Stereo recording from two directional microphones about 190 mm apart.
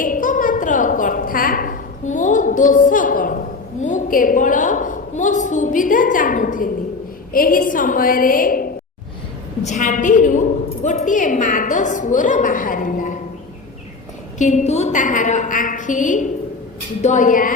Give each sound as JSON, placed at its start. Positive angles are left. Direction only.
{"t": 0.0, "sound": "a sound", "side_deg": 45}
{"t": 7.3, "sound": "a woman's voice", "side_deg": 50}
{"t": 14.3, "sound": "a woman's voice", "side_deg": 40}